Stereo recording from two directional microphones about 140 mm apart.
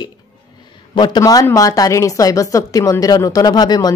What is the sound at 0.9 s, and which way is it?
Speech, 30° left (ahead or behind).